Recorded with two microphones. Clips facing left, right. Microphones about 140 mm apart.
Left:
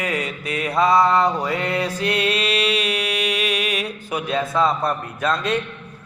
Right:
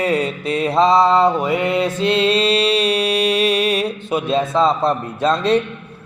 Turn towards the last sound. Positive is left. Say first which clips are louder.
# right 6 dB
turn(degrees=-30)  # may be behind; listen again after turning